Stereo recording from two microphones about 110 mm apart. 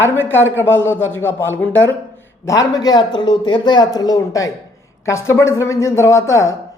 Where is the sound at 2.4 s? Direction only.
30° left (ahead or behind).